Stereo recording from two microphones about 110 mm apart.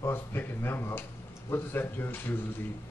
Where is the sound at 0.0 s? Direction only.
20° left (ahead or behind).